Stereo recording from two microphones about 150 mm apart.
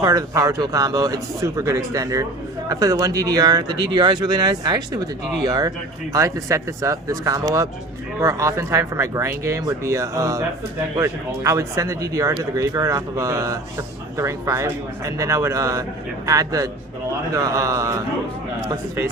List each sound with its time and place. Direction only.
0.0 s speech: 20° right (ahead or behind)